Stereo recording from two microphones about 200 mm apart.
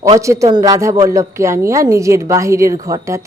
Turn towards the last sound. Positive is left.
turn(degrees=-15)  # may be behind; listen again after turning